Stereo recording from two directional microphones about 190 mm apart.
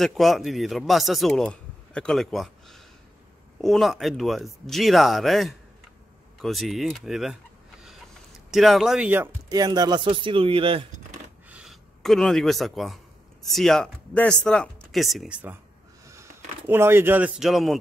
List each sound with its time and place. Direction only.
0.0 s speech: centre (ahead or behind)
8.5 s speech: centre (ahead or behind); by 10.8 s 30° right (ahead or behind)
11.4 s a sound: 5° right (ahead or behind)
13.5 s speech: centre (ahead or behind)